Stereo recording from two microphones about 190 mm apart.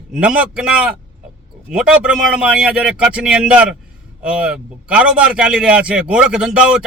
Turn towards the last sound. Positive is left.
turn(degrees=-5)  # may be behind; listen again after turning